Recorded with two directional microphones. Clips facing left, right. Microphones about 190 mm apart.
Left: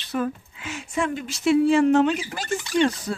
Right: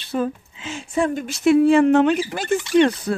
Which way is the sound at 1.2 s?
55° right (ahead or behind).